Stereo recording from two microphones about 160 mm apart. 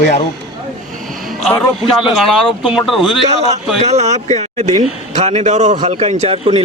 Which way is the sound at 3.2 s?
45° right (ahead or behind).